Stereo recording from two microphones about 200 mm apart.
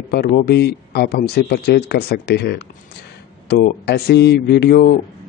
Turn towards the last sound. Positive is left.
turn(degrees=50)  # may be behind; listen again after turning